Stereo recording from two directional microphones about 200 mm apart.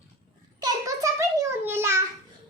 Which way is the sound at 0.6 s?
15° right (ahead or behind).